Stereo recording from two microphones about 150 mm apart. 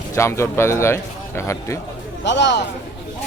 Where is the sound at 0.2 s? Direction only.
20° left (ahead or behind).